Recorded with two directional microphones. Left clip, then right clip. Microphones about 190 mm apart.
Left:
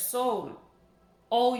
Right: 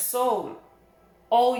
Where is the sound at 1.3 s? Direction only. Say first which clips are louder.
Right 4 dB; 30° left (ahead or behind).